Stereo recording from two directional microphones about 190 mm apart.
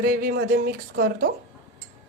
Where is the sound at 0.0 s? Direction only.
50° right (ahead or behind).